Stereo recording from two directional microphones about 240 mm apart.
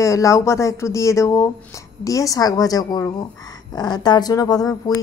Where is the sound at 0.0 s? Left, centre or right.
Centre.